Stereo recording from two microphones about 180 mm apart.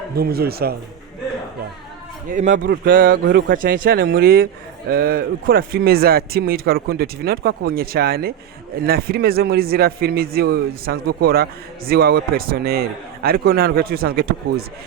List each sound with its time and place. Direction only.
0.2 s speech: 60° right (ahead or behind)
2.3 s a man's voice: 45° right (ahead or behind)
2.6 s speech: 65° right (ahead or behind)